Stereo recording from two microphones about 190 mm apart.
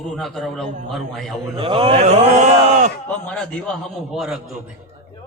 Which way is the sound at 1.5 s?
30° right (ahead or behind).